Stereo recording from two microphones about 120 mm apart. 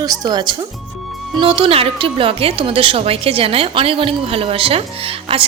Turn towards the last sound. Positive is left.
turn(degrees=-50)  # may be behind; listen again after turning